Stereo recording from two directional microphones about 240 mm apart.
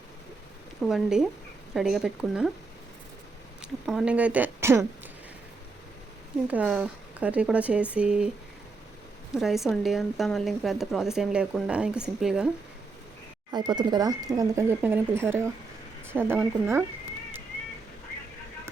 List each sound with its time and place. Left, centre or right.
0.9 s speech: centre
3.6 s speech: centre
6.5 s speech: centre
9.3 s speech: centre
13.5 s speech: centre